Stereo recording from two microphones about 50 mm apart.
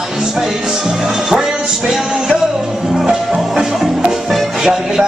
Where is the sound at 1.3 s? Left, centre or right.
Centre.